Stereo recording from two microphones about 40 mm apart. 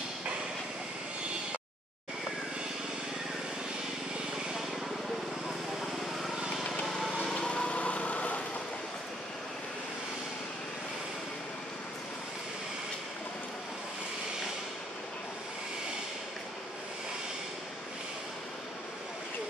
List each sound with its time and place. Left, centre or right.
7.3 s light engine: left